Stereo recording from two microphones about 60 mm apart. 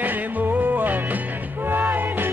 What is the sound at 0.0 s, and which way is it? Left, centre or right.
Music, right.